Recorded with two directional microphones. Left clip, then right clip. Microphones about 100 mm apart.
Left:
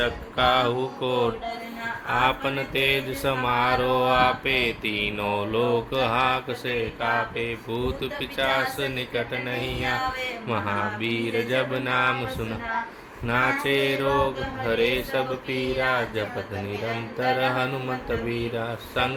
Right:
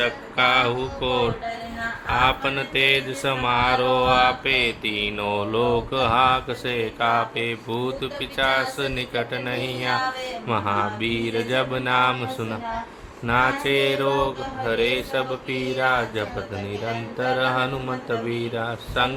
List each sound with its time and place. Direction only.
0.0 s mantra: 15° left (ahead or behind); by 6.7 s centre (ahead or behind)
7.0 s speech: 10° right (ahead or behind)
13.2 s mantra: 5° left (ahead or behind)